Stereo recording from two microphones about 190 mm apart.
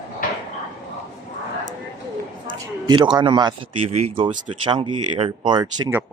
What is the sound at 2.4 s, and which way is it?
A man's voice, 25° right (ahead or behind).